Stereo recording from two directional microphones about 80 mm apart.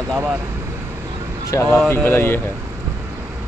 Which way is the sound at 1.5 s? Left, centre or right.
Left.